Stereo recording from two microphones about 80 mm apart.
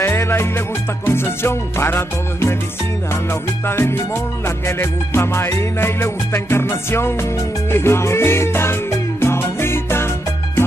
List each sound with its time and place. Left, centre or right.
0.0 s music: left